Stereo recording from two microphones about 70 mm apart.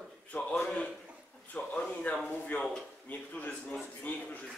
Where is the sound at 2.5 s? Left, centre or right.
Left.